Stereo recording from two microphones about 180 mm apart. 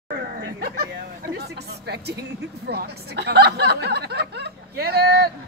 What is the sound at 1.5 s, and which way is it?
Speech, 65° right (ahead or behind).